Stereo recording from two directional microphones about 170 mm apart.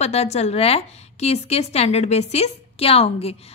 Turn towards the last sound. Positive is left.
turn(degrees=35)  # may be behind; listen again after turning